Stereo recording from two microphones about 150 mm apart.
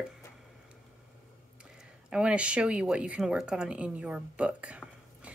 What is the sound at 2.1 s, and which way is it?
Speech, 5° right (ahead or behind).